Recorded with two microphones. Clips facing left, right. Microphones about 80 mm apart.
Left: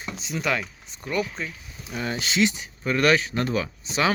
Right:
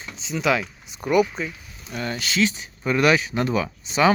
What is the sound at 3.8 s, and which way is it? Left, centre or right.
Speech, centre.